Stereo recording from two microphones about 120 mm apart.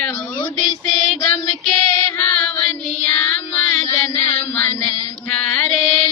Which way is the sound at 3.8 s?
30° left (ahead or behind).